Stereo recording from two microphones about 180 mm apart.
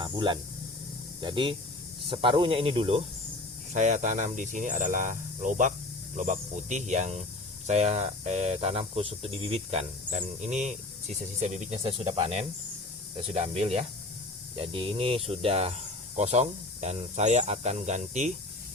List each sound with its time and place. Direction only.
0.0 s speech: 25° right (ahead or behind)
3.7 s speech: 40° right (ahead or behind)